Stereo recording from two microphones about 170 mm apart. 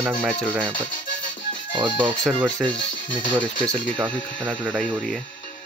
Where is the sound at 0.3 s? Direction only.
5° left (ahead or behind).